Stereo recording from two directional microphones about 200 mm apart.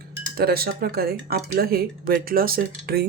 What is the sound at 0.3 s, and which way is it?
Speech, 50° right (ahead or behind).